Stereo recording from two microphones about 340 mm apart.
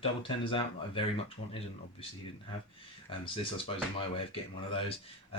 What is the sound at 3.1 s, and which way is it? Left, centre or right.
Speech, centre.